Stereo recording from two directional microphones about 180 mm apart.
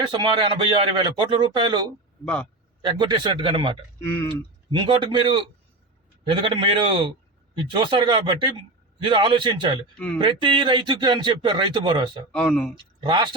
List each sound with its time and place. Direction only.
0.0 s a man's voice: 25° right (ahead or behind)
2.2 s a man's voice: 10° left (ahead or behind)
2.8 s a man's voice: 25° right (ahead or behind)
4.8 s a man's voice: 30° right (ahead or behind)
12.3 s speech: 5° left (ahead or behind)
13.0 s speech: 25° right (ahead or behind)